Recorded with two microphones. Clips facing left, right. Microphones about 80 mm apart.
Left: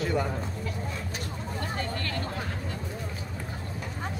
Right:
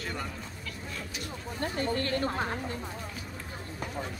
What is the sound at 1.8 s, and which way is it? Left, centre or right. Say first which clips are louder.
Speech: right 3 dB; right.